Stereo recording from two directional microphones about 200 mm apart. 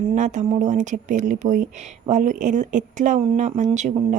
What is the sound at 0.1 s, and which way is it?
Speech, 35° right (ahead or behind).